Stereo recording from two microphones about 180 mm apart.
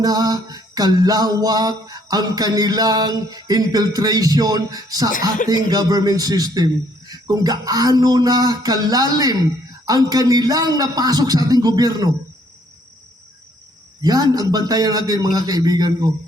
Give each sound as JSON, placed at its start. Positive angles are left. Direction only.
{"t": 0.0, "sound": "music", "side_deg": -20}
{"t": 14.0, "sound": "music", "side_deg": -20}